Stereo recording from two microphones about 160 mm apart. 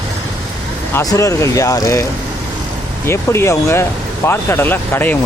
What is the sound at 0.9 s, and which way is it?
Speech, 20° left (ahead or behind).